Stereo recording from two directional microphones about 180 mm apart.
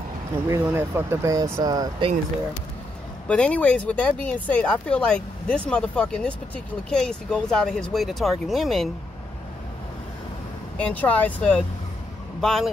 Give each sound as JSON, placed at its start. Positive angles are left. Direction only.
{"t": 0.5, "sound": "speech", "side_deg": -15}
{"t": 3.3, "sound": "speech", "side_deg": 5}
{"t": 10.8, "sound": "speech", "side_deg": 5}